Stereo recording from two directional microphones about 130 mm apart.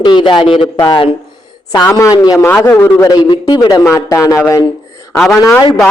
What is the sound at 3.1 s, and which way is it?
A man's voice, 35° left (ahead or behind).